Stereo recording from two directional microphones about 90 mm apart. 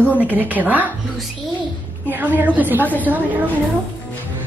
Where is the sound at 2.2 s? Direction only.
20° right (ahead or behind).